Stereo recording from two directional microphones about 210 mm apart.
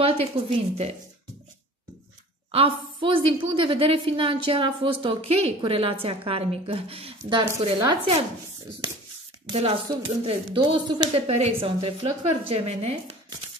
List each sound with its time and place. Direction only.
0.0 s a woman's voice: 30° right (ahead or behind)
2.5 s a woman's voice: 25° right (ahead or behind)
9.5 s a woman's voice: 30° right (ahead or behind)